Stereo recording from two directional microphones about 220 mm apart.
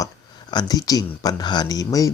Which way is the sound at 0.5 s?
15° left (ahead or behind).